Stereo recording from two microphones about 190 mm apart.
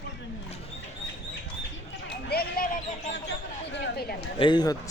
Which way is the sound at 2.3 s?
50° left (ahead or behind).